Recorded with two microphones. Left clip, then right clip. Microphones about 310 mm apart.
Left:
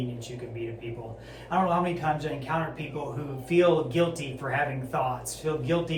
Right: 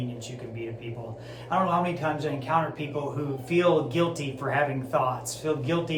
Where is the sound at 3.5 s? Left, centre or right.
Centre.